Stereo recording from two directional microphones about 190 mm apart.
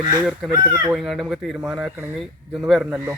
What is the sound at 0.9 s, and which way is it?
Speech, centre (ahead or behind).